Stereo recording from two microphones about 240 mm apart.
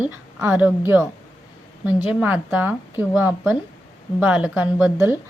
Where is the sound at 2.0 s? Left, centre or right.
Centre.